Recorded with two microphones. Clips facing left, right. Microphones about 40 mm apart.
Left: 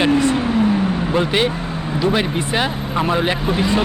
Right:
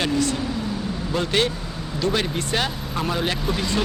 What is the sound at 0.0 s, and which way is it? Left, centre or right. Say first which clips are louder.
Speech: left 7 dB; left.